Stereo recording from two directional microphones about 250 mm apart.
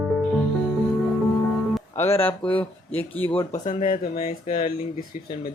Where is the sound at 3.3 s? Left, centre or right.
Left.